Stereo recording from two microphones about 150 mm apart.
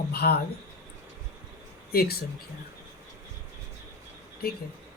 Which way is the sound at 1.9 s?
90° left.